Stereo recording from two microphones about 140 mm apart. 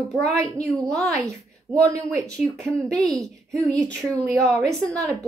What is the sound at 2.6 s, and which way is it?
A woman's voice, 5° left (ahead or behind).